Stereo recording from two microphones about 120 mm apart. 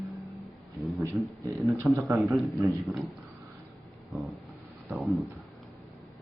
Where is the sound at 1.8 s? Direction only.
25° right (ahead or behind).